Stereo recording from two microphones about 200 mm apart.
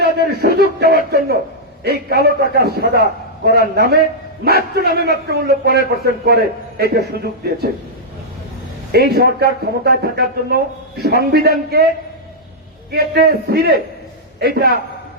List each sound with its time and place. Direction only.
0.0 s a man's voice: 55° right (ahead or behind)
8.9 s a man's voice: 50° right (ahead or behind)
12.9 s a man's voice: 55° right (ahead or behind)